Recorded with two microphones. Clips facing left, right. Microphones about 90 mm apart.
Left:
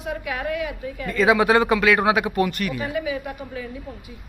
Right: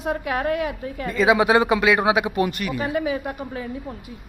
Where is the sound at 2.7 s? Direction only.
35° right (ahead or behind).